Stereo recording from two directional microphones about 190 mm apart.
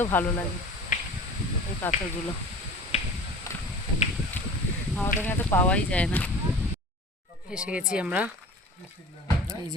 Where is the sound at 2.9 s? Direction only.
35° left (ahead or behind).